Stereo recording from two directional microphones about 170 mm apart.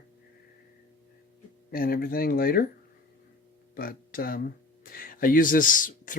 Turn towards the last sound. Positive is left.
turn(degrees=50)  # may be behind; listen again after turning